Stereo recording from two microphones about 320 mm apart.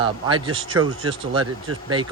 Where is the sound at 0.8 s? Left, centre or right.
Right.